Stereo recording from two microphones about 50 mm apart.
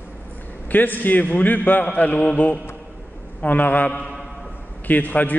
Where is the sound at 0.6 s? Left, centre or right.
Left.